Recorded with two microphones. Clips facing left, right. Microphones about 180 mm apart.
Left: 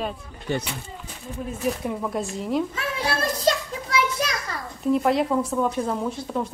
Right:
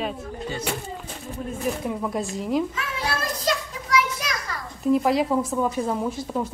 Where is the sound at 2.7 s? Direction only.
30° left (ahead or behind).